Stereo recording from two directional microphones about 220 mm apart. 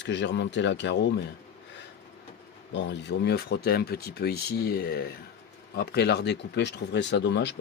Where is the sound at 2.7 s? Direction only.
55° left (ahead or behind).